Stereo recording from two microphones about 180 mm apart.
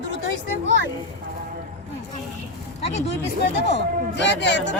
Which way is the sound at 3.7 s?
75° left (ahead or behind).